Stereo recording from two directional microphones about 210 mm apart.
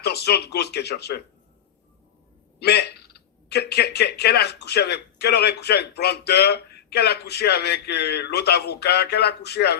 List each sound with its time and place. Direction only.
0.0 s speech: 50° left (ahead or behind)
2.6 s speech: 50° left (ahead or behind)